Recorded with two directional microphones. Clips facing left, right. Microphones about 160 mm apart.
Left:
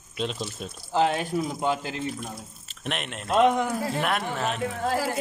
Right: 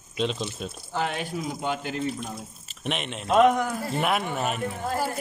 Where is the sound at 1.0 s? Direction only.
40° left (ahead or behind).